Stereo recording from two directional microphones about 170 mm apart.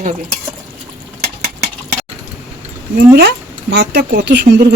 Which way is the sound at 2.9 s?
70° right (ahead or behind).